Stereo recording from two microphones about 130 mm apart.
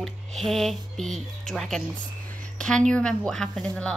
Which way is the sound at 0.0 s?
Centre (ahead or behind).